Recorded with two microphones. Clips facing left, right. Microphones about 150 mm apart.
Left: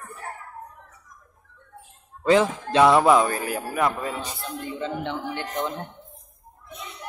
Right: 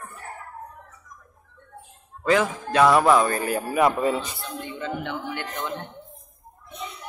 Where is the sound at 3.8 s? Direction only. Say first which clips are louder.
Right 5 dB; 20° right (ahead or behind).